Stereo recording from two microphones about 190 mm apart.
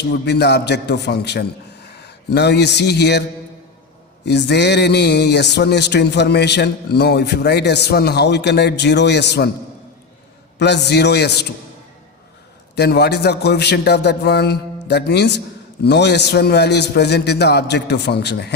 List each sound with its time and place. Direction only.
0.0 s a man's voice: 65° left (ahead or behind)
4.3 s speech: 65° left (ahead or behind)
10.6 s speech: 60° left (ahead or behind)
12.7 s speech: 60° left (ahead or behind)